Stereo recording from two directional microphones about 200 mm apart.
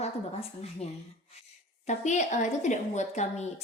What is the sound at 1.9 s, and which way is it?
A woman's voice, 35° left (ahead or behind).